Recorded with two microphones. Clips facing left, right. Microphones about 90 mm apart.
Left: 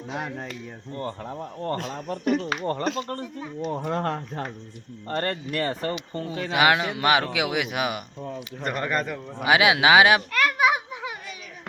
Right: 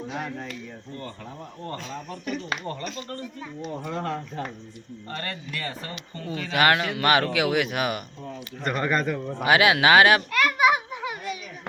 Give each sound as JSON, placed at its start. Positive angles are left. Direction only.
{"t": 0.2, "sound": "speech", "side_deg": 20}
{"t": 0.9, "sound": "speech", "side_deg": 40}
{"t": 3.8, "sound": "speech", "side_deg": 50}
{"t": 6.2, "sound": "speech", "side_deg": 25}
{"t": 6.5, "sound": "speech", "side_deg": 10}
{"t": 10.3, "sound": "a sound", "side_deg": 0}